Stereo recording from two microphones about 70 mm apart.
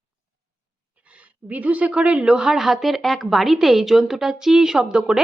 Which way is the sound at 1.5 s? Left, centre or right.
Right.